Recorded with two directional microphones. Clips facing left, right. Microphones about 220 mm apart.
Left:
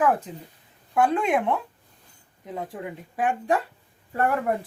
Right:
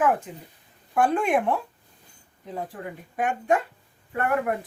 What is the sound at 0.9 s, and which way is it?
Speech, 20° left (ahead or behind).